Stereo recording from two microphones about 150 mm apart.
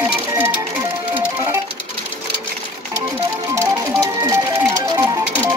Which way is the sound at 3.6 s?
20° right (ahead or behind).